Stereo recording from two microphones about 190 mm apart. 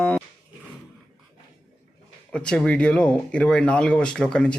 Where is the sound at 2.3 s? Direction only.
5° left (ahead or behind).